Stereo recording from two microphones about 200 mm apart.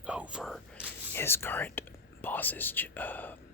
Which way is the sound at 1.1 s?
10° left (ahead or behind).